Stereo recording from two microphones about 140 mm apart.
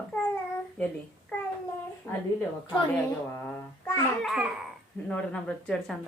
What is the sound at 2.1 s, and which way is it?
Speech, 15° left (ahead or behind).